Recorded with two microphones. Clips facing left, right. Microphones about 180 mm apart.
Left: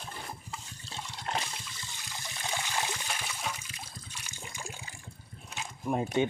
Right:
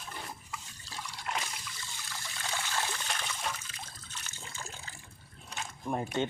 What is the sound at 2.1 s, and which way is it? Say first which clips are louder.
Trickle: left 2 dB; 20° left (ahead or behind).